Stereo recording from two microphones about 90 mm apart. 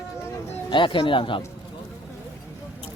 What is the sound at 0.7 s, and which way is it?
Speech, 65° left (ahead or behind).